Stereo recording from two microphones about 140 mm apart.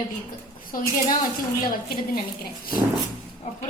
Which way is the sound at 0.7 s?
90° left.